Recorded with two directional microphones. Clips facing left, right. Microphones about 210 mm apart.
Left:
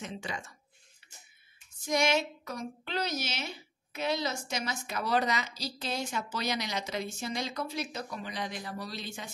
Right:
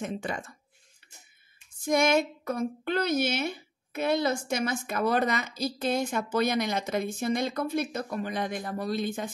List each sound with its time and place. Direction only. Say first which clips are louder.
0.0 s a woman's voice: right 6 dB; 55° right (ahead or behind)
1.8 s a woman's voice: right 5 dB; 55° right (ahead or behind)